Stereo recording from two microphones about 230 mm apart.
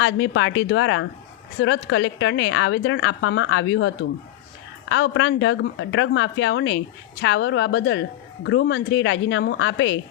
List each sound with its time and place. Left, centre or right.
0.0 s a woman's voice: left